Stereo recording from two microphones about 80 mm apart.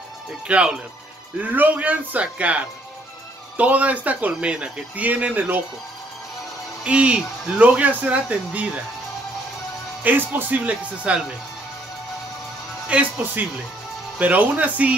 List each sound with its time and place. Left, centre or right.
0.5 s speech: centre
6.8 s speech: centre
10.0 s speech: right
12.9 s speech: centre
14.1 s speech: centre